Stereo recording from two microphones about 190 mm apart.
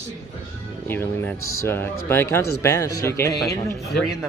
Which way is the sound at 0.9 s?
10° left (ahead or behind).